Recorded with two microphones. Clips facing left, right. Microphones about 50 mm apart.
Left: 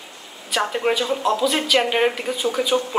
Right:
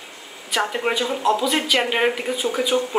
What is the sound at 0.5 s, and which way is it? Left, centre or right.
Speech, centre.